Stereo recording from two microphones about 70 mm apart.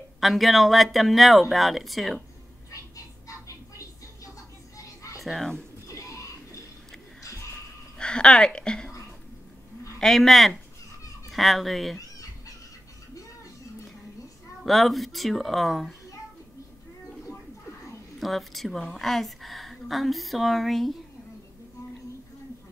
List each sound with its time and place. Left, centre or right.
0.2 s speech: centre
3.3 s music: left
4.7 s children playing: left
5.2 s speech: centre
5.9 s a sound: left
8.0 s speech: centre
9.9 s speech: centre
14.6 s speech: centre
18.2 s speech: centre